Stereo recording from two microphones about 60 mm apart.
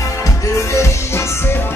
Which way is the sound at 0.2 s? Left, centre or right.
Left.